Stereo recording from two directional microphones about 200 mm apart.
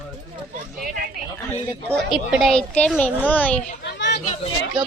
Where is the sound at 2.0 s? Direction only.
Centre (ahead or behind).